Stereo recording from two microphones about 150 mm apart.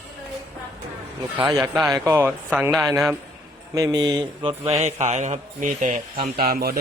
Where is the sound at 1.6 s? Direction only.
5° right (ahead or behind).